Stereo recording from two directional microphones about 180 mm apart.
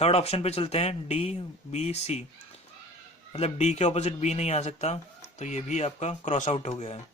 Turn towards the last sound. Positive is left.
turn(degrees=40)  # may be behind; listen again after turning